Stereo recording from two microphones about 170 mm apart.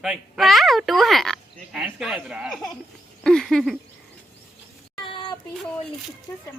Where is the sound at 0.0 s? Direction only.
Centre (ahead or behind).